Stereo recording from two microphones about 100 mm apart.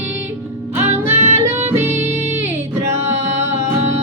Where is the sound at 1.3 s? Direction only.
25° right (ahead or behind).